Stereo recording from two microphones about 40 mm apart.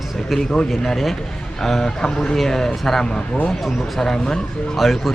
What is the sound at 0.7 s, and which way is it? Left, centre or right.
Speech, centre.